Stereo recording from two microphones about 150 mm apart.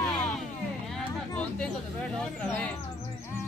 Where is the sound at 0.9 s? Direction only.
5° left (ahead or behind).